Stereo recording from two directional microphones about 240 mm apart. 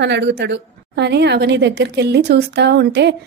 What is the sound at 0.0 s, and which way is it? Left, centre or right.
A woman's voice, right.